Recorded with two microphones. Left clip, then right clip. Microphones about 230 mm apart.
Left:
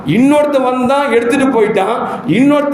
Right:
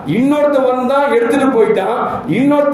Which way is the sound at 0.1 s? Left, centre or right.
Left.